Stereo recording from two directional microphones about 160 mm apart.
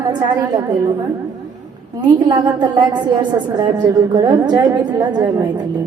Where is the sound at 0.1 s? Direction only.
25° right (ahead or behind).